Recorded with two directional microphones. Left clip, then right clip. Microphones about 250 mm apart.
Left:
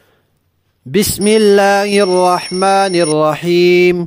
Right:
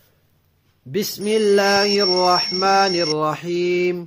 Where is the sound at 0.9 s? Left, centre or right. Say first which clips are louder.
Left 8 dB; left.